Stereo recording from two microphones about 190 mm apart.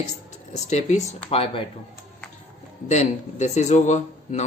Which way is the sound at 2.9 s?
35° left (ahead or behind).